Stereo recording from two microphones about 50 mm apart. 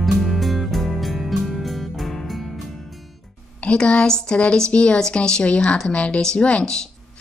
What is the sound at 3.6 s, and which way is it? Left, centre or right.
Speech, left.